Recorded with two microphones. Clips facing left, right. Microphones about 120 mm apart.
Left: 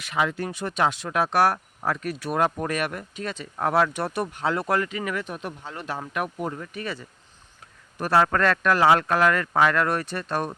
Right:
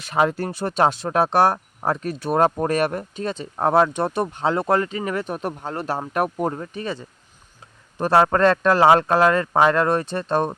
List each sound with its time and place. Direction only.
0.0 s speech: 40° right (ahead or behind)